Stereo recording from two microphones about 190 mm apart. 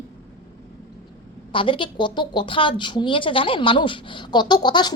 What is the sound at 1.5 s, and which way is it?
A woman's voice, 25° left (ahead or behind).